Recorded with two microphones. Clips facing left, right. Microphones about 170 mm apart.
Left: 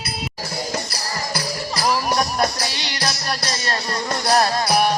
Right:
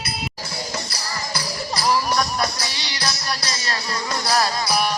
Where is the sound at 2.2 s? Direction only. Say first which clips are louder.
Left 3 dB; 45° left (ahead or behind).